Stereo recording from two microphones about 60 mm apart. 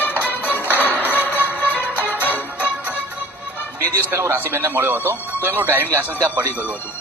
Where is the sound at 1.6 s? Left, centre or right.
Left.